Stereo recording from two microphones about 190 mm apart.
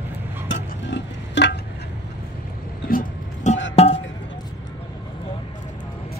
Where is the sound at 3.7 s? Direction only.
30° left (ahead or behind).